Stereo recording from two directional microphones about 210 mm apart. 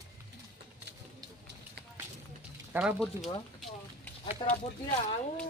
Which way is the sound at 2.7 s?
10° right (ahead or behind).